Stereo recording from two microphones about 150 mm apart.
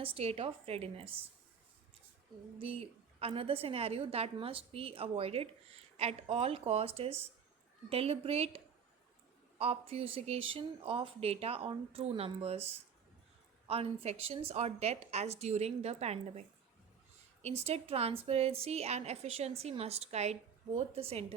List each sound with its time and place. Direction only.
0.0 s a woman's voice: 40° right (ahead or behind)
2.6 s a woman's voice: 40° right (ahead or behind)
13.7 s a woman's voice: 40° right (ahead or behind)
17.7 s a woman's voice: 45° right (ahead or behind)